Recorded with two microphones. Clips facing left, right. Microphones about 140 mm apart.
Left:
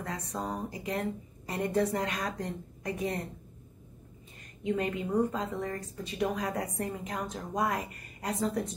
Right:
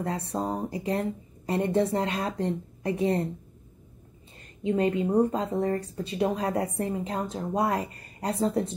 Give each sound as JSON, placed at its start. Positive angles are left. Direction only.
{"t": 0.0, "sound": "a woman's voice", "side_deg": -30}
{"t": 4.6, "sound": "speech", "side_deg": -30}